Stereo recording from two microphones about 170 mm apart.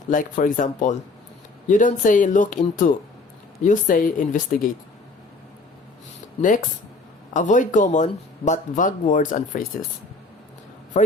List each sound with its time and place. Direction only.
0.1 s speech: 50° left (ahead or behind)
6.4 s speech: 50° left (ahead or behind)